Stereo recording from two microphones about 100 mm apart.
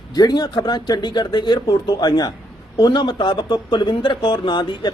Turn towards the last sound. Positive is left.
turn(degrees=50)  # may be behind; listen again after turning